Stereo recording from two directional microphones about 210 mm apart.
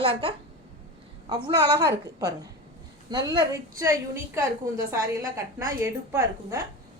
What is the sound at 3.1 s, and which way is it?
A woman's voice, 20° right (ahead or behind).